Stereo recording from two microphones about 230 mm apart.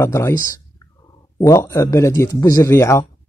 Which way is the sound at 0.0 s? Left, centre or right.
Centre.